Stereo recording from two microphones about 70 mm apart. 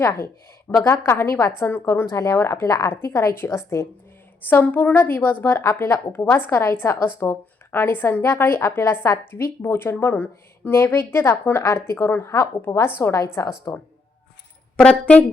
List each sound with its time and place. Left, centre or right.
0.9 s a woman's voice: left
2.6 s a woman's voice: left
2.9 s a woman's voice: left
4.4 s a woman's voice: left
14.8 s speech: centre